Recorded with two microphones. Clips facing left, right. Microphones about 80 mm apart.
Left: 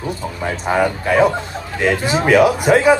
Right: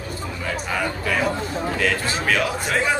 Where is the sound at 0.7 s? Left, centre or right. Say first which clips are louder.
Left 9 dB; left.